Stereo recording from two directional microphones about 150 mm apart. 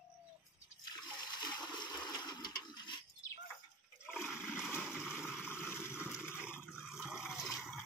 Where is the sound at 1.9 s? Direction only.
25° left (ahead or behind).